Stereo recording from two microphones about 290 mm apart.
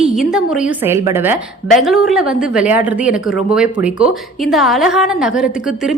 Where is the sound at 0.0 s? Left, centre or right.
Centre.